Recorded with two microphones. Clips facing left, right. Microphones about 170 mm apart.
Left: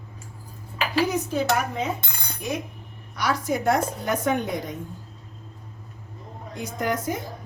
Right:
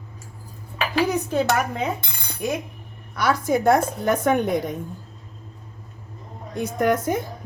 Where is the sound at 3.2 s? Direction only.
55° right (ahead or behind).